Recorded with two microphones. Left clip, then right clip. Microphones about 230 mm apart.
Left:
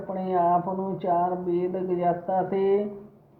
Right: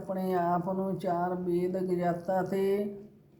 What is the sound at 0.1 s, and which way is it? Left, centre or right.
Speech, right.